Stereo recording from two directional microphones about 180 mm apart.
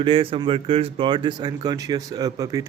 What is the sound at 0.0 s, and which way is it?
A man's voice, 30° right (ahead or behind).